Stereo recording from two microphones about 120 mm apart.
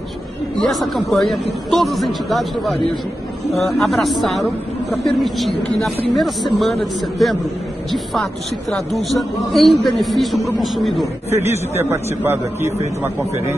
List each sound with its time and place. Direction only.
0.6 s speech: centre (ahead or behind)
11.2 s a man's voice: 65° right (ahead or behind)
11.7 s a man's voice: 20° right (ahead or behind)